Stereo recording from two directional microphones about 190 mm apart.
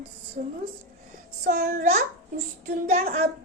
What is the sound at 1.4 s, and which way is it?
Speech, 45° right (ahead or behind).